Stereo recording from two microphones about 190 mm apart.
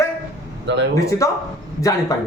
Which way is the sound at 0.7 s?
65° right (ahead or behind).